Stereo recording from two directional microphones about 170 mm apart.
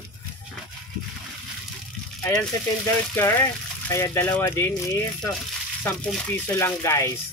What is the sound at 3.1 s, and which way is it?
Speech, 15° left (ahead or behind).